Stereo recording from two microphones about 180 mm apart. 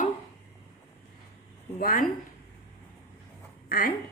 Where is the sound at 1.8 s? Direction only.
50° left (ahead or behind).